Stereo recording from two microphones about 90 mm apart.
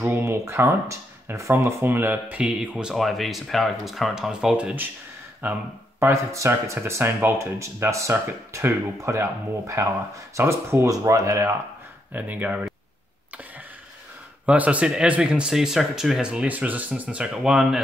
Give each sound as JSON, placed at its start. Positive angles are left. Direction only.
{"t": 0.0, "sound": "speech", "side_deg": -25}
{"t": 5.4, "sound": "speech", "side_deg": -20}
{"t": 12.1, "sound": "speech", "side_deg": -20}
{"t": 14.4, "sound": "speech", "side_deg": -15}